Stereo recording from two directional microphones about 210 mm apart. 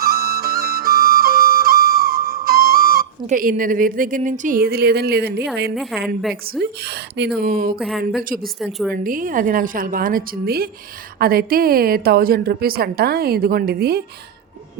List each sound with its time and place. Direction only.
0.0 s flute: 45° right (ahead or behind)
5.7 s a woman's voice: centre (ahead or behind)
6.4 s a woman's voice: 45° right (ahead or behind)
7.8 s a woman's voice: centre (ahead or behind)
8.2 s a woman's voice: 40° right (ahead or behind)
8.5 s a woman's voice: centre (ahead or behind)
9.0 s a woman's voice: 40° right (ahead or behind)